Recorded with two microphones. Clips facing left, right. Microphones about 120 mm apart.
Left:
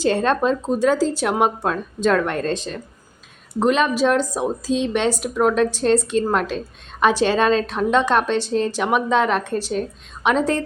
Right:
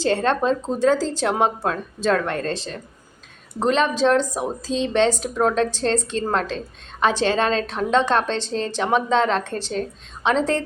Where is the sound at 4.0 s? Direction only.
10° left (ahead or behind).